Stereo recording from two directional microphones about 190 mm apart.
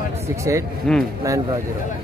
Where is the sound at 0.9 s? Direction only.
5° left (ahead or behind).